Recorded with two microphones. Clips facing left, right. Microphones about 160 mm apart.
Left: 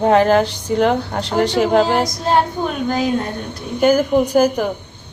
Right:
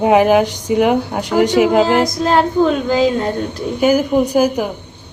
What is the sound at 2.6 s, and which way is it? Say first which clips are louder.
Speech: right 6 dB; 90° right.